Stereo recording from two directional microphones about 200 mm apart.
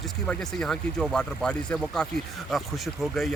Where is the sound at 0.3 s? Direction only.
5° left (ahead or behind).